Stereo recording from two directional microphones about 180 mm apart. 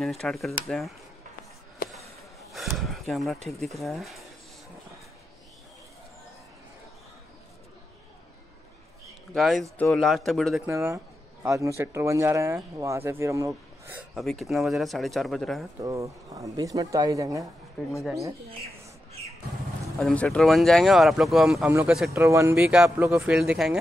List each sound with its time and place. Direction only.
0.0 s speech: centre (ahead or behind)
1.8 s a sound: 55° left (ahead or behind)
2.8 s a sound: centre (ahead or behind)
3.7 s speech: centre (ahead or behind)
9.3 s speech: centre (ahead or behind)
10.7 s speech: 15° right (ahead or behind)
14.1 s speech: centre (ahead or behind)
15.8 s speech: 15° right (ahead or behind)
20.0 s speech: centre (ahead or behind)
22.2 s speech: 15° right (ahead or behind)